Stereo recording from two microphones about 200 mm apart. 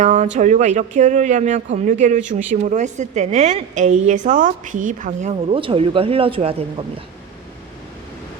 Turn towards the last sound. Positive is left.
turn(degrees=-30)  # may be behind; listen again after turning